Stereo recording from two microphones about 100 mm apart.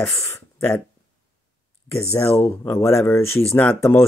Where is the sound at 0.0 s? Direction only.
20° left (ahead or behind).